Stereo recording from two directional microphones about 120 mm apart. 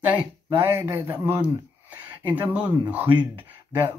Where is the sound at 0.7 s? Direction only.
25° right (ahead or behind).